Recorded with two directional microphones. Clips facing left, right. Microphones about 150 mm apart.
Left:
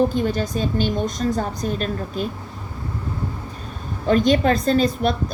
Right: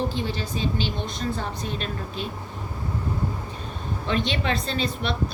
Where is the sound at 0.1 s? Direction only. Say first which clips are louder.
Left 7 dB; 45° left (ahead or behind).